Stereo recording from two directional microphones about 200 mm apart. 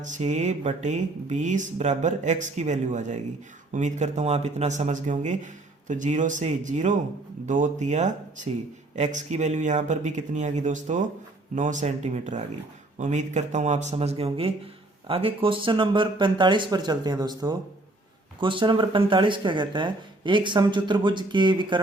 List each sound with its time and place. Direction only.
0.0 s speech: 35° right (ahead or behind)